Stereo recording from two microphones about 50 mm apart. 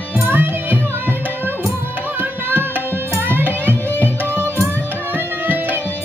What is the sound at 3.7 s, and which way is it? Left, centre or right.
Tabla, right.